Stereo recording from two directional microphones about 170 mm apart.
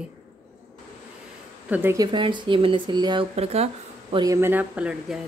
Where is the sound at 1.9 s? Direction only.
25° right (ahead or behind).